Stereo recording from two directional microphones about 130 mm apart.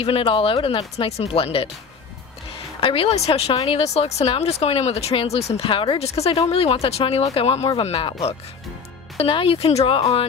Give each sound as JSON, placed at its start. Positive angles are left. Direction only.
{"t": 0.0, "sound": "speech", "side_deg": 45}
{"t": 2.8, "sound": "speech", "side_deg": 45}